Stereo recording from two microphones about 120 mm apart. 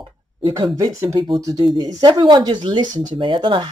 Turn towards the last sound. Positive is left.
turn(degrees=-40)  # may be behind; listen again after turning